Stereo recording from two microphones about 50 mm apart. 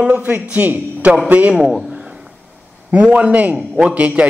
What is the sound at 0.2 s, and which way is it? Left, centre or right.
A man's voice, right.